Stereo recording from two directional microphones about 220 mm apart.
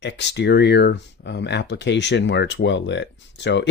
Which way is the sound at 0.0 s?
50° left (ahead or behind).